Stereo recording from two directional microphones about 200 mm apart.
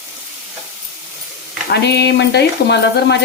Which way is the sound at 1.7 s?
55° left (ahead or behind).